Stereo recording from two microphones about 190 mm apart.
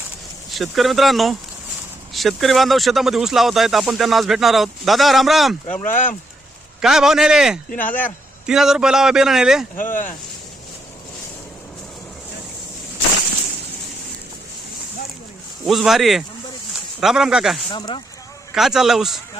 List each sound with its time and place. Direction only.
0.5 s speech: centre (ahead or behind)
5.7 s speech: 10° left (ahead or behind)
6.8 s speech: 5° right (ahead or behind)
7.8 s speech: 10° left (ahead or behind)
8.4 s speech: 5° right (ahead or behind)
9.7 s speech: 45° left (ahead or behind)
15.6 s speech: centre (ahead or behind)
17.7 s speech: 25° left (ahead or behind)
18.5 s speech: centre (ahead or behind)